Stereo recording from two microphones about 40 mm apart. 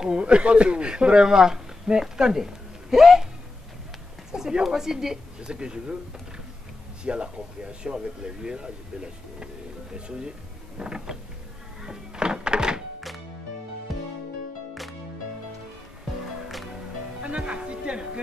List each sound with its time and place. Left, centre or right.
0.0 s speech: right
4.3 s speech: right
4.6 s a woman's voice: centre
5.5 s speech: right
7.1 s speech: right
11.8 s music: centre
14.7 s music: centre
17.2 s speech: right